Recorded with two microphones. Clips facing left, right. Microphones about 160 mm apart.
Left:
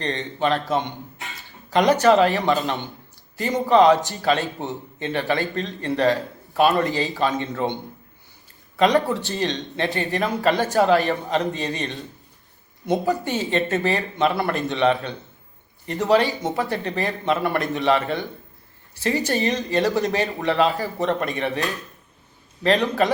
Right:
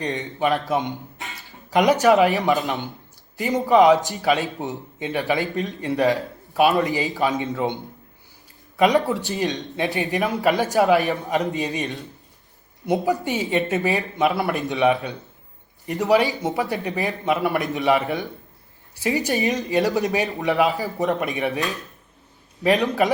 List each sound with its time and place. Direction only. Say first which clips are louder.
0.2 s a man's voice: even; 10° right (ahead or behind)
2.0 s a man's voice: even; 15° right (ahead or behind)
9.0 s a man's voice: right 1 dB; 15° right (ahead or behind)
22.8 s a man's voice: even; 10° right (ahead or behind)